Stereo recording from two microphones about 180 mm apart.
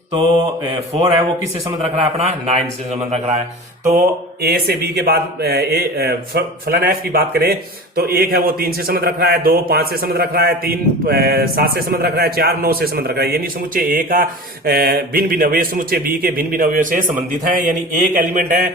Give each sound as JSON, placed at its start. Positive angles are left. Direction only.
{"t": 0.7, "sound": "a man's voice", "side_deg": -25}
{"t": 4.4, "sound": "a man's voice", "side_deg": -60}